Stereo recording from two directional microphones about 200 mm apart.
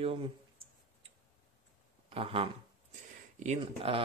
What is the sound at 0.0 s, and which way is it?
Speech, 25° right (ahead or behind).